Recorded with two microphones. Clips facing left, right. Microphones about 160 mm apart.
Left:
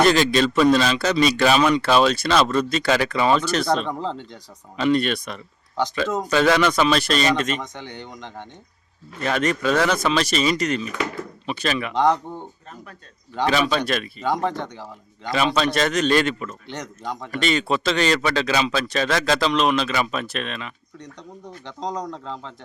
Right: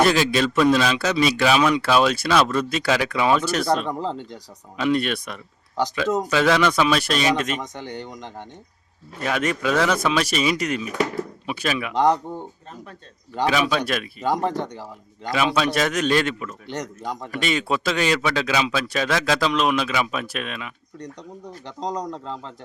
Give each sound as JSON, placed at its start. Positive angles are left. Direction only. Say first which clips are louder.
{"t": 0.0, "sound": "speech", "louder": "left 1 dB", "side_deg": -5}
{"t": 7.6, "sound": "speech", "louder": "right 2 dB", "side_deg": -40}
{"t": 8.0, "sound": "speech", "louder": "right 1 dB", "side_deg": -10}
{"t": 13.3, "sound": "speech", "louder": "even", "side_deg": -5}
{"t": 22.1, "sound": "speech", "louder": "right 1 dB", "side_deg": -5}